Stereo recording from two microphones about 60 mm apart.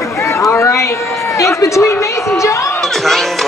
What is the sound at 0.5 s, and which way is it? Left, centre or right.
Speech, left.